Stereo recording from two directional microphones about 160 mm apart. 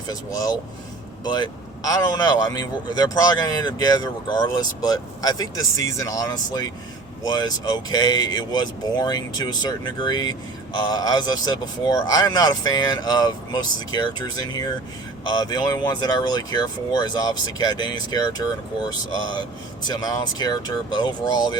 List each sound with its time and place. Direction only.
0.1 s speech: 20° left (ahead or behind)
19.9 s speech: 25° left (ahead or behind)